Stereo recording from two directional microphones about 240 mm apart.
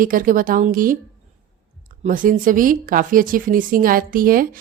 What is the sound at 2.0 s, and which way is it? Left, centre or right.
Speech, right.